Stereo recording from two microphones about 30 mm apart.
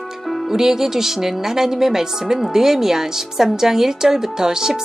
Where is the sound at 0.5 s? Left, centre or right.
Centre.